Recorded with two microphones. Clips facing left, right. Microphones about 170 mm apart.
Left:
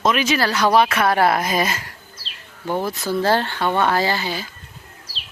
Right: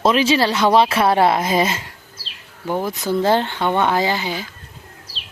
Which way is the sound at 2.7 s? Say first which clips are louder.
Right 1 dB; 15° right (ahead or behind).